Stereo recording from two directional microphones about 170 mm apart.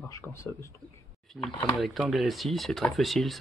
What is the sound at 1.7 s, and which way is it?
Speech, centre (ahead or behind).